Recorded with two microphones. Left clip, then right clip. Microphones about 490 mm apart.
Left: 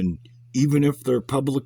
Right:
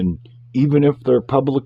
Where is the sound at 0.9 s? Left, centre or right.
Left.